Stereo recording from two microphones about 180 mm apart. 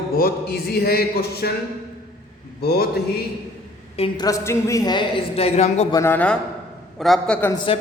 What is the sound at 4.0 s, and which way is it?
A woman's voice, 20° left (ahead or behind).